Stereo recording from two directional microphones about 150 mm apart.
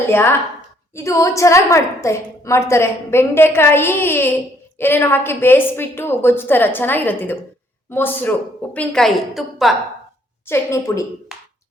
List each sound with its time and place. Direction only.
0.9 s a woman's voice: 20° left (ahead or behind); by 9.7 s centre (ahead or behind)
10.4 s a woman's voice: 20° left (ahead or behind)